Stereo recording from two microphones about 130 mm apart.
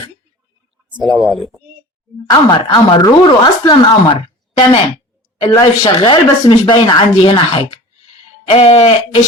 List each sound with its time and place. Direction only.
0.9 s speech: 35° right (ahead or behind)
1.2 s speech: centre (ahead or behind)
2.3 s speech: 30° left (ahead or behind); by 9.2 s 45° left (ahead or behind)